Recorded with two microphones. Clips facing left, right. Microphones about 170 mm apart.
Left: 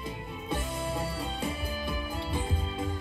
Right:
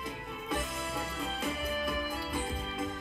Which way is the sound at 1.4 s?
30° left (ahead or behind).